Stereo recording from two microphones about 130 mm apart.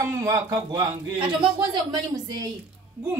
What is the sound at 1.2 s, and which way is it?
Speech, 40° right (ahead or behind).